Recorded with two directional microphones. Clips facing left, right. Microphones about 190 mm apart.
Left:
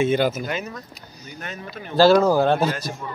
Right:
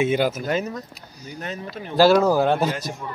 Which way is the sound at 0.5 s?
35° right (ahead or behind).